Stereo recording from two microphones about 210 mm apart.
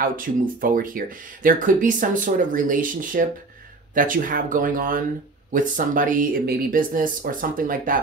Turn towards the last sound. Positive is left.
turn(degrees=-40)  # may be behind; listen again after turning